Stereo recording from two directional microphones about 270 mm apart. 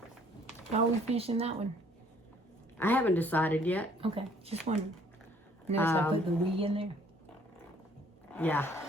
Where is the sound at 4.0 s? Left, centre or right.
Right.